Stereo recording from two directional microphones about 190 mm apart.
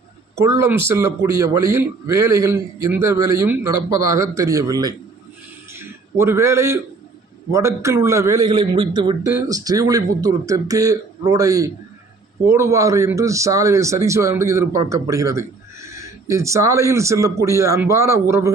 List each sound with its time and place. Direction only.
0.3 s a man's voice: 15° right (ahead or behind)
5.7 s a sound: 15° right (ahead or behind)
7.5 s a man's voice: 15° right (ahead or behind)